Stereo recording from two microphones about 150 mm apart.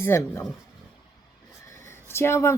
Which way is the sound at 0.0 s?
20° left (ahead or behind).